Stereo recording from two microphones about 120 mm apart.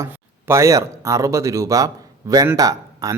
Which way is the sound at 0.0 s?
25° right (ahead or behind).